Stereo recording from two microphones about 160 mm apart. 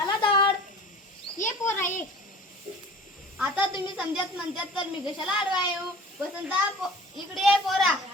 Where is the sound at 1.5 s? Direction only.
15° left (ahead or behind).